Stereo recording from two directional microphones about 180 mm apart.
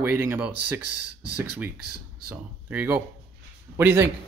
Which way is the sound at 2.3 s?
10° right (ahead or behind).